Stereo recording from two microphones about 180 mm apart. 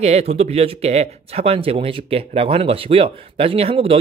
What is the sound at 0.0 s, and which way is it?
A man's voice, 35° right (ahead or behind).